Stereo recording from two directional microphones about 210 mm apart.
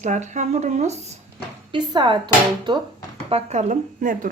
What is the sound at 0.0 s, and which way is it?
Speech, 35° right (ahead or behind).